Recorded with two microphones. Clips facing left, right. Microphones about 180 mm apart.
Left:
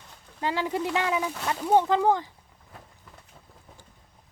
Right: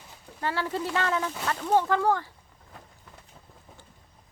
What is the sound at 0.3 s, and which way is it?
Speech, 15° left (ahead or behind).